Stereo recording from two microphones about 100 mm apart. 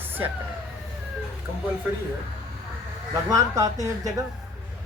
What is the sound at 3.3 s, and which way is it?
Speech, 35° right (ahead or behind).